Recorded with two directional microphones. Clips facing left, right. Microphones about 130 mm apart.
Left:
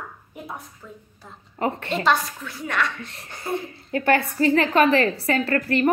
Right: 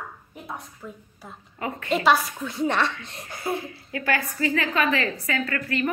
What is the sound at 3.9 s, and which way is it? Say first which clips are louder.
Speech: left 7 dB; 40° left (ahead or behind).